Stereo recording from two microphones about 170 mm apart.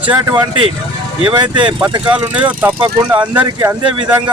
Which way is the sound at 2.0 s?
10° right (ahead or behind).